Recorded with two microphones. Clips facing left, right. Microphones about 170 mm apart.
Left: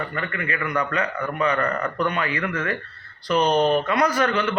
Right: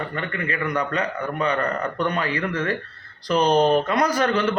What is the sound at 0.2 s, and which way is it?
A man's voice, 35° right (ahead or behind).